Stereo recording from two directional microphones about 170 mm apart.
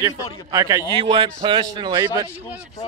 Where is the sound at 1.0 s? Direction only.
35° right (ahead or behind).